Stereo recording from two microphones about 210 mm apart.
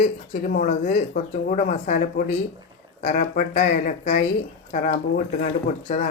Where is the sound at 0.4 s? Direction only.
40° left (ahead or behind).